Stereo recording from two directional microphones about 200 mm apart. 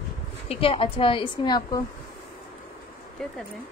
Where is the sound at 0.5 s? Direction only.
30° left (ahead or behind).